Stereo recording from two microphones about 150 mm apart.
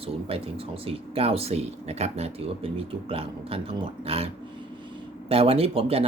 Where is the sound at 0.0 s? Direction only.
40° right (ahead or behind).